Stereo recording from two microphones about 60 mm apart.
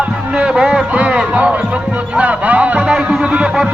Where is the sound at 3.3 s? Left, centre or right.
Centre.